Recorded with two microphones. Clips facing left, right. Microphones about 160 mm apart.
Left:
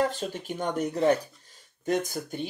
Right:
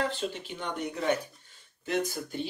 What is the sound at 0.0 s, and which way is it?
Speech, 45° left (ahead or behind).